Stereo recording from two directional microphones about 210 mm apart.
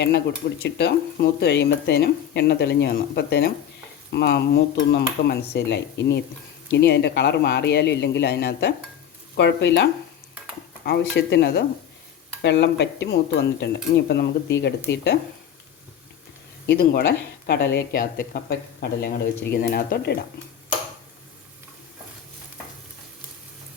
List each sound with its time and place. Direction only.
0.0 s speech: 55° left (ahead or behind)
9.3 s stir: 55° left (ahead or behind)
11.2 s speech: 50° left (ahead or behind)
12.4 s stir: 55° left (ahead or behind)
14.8 s speech: 55° left (ahead or behind)
16.6 s speech: 45° left (ahead or behind)